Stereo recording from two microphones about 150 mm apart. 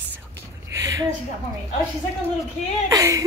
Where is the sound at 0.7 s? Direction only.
20° right (ahead or behind).